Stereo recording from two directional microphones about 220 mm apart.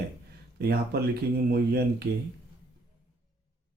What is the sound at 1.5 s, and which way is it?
Speech, 45° right (ahead or behind).